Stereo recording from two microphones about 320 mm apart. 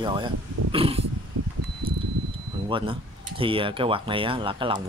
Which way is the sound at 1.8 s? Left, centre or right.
Centre.